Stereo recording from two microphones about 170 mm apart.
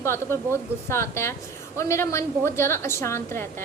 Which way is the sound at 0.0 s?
15° left (ahead or behind).